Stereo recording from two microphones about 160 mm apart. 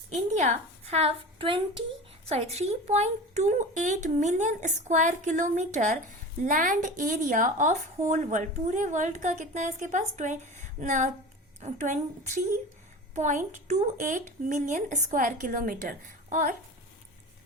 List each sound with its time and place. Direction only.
0.1 s a woman's voice: 45° right (ahead or behind)
2.3 s a woman's voice: 45° right (ahead or behind)